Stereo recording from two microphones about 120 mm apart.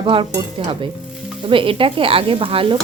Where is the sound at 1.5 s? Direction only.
45° right (ahead or behind).